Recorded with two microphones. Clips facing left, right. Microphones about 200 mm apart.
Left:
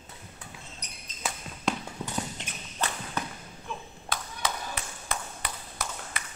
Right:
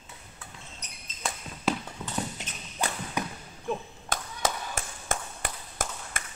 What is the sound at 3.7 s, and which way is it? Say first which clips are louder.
Clapping: right 6 dB; 45° right (ahead or behind).